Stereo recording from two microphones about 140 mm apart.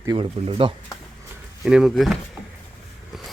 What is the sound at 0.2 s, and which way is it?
Speech, 40° right (ahead or behind).